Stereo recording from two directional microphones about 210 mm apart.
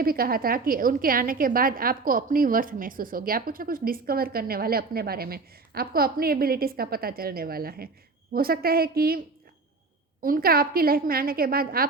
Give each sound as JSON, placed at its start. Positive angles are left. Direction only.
{"t": 0.0, "sound": "a woman's voice", "side_deg": -45}